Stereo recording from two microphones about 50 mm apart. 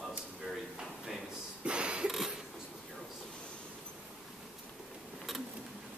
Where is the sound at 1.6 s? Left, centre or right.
Right.